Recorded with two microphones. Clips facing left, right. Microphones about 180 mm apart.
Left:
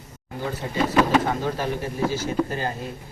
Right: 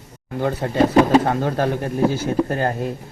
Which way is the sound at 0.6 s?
60° right (ahead or behind).